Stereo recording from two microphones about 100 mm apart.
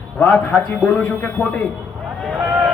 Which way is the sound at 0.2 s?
15° left (ahead or behind).